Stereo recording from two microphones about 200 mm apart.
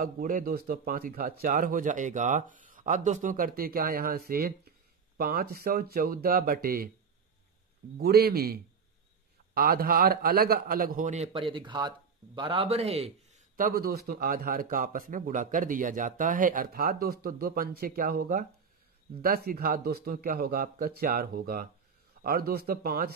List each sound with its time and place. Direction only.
0.0 s speech: 45° right (ahead or behind)
8.0 s speech: 50° right (ahead or behind)